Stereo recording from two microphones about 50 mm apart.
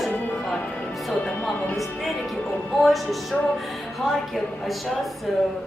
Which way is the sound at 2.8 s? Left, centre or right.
Centre.